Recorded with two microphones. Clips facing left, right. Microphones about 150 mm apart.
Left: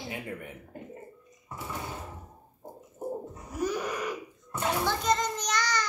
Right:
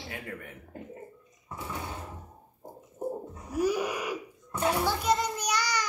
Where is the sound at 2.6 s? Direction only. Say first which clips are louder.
Left 1 dB; 10° right (ahead or behind).